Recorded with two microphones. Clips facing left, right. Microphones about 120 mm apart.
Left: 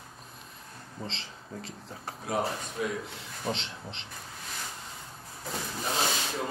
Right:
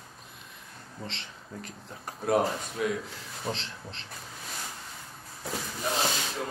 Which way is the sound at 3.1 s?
25° left (ahead or behind).